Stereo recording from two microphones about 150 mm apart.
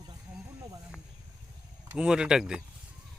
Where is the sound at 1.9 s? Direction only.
5° right (ahead or behind).